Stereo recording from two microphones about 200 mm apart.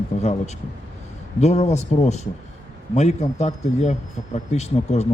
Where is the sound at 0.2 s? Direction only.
35° left (ahead or behind).